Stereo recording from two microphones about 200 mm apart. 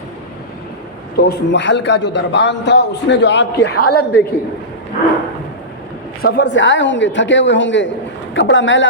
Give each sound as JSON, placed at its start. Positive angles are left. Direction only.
{"t": 1.1, "sound": "a man's voice", "side_deg": 60}
{"t": 6.2, "sound": "a woman's voice", "side_deg": 55}